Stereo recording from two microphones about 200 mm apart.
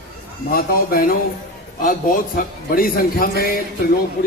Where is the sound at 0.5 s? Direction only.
45° left (ahead or behind).